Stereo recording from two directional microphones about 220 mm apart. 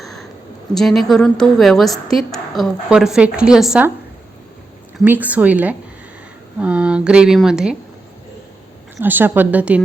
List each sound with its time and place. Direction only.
0.0 s a sound: centre (ahead or behind)
0.7 s a woman's voice: centre (ahead or behind)
4.9 s a woman's voice: 10° right (ahead or behind)
9.0 s a woman's voice: 10° right (ahead or behind)